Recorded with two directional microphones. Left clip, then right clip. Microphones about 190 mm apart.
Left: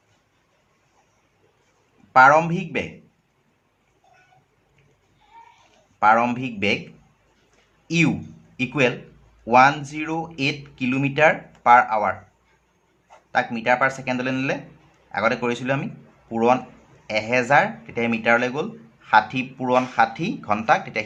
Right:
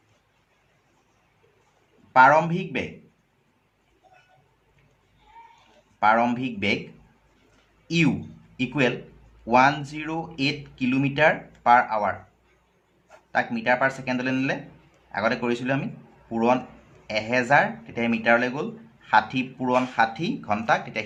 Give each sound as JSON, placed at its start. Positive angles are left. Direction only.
{"t": 2.1, "sound": "speech", "side_deg": 30}
{"t": 6.0, "sound": "speech", "side_deg": 30}
{"t": 7.9, "sound": "a man's voice", "side_deg": 30}
{"t": 13.3, "sound": "speech", "side_deg": 25}